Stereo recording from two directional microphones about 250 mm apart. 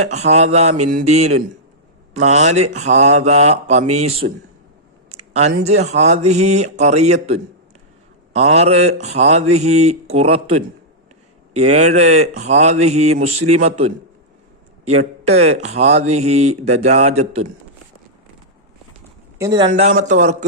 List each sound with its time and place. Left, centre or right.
0.1 s speech: right
19.4 s speech: centre
19.7 s speech: right